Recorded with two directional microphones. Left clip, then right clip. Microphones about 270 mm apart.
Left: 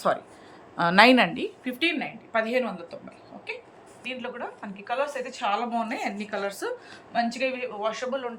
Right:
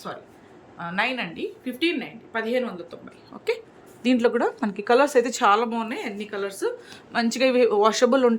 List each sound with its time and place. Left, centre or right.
0.8 s a woman's voice: left; by 3.0 s centre
4.0 s a woman's voice: right; by 6.7 s centre
7.1 s a woman's voice: centre